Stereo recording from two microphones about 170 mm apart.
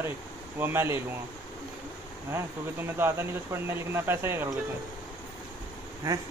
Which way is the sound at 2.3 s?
15° right (ahead or behind).